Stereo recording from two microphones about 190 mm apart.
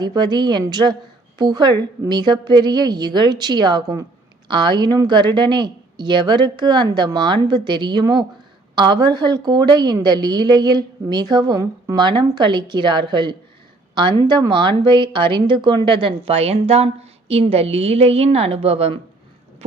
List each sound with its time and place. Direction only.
0.0 s a woman's voice: 20° right (ahead or behind)